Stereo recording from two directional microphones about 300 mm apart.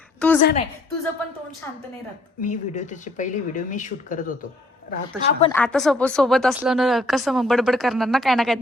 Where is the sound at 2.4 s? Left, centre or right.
Left.